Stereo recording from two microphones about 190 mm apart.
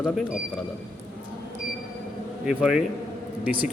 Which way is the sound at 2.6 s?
Centre (ahead or behind).